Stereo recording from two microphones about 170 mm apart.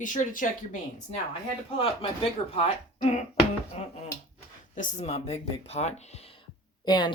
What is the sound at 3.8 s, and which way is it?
Speech, 40° left (ahead or behind).